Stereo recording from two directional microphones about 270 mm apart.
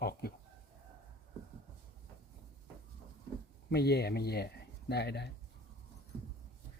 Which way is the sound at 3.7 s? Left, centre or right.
Left.